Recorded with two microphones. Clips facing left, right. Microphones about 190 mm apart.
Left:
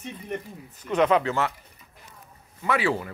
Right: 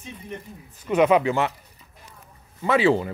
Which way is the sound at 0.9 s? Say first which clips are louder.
Right 3 dB; 10° right (ahead or behind).